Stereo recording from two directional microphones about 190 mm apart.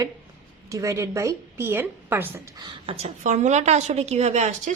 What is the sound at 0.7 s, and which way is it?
A woman's voice, 15° right (ahead or behind).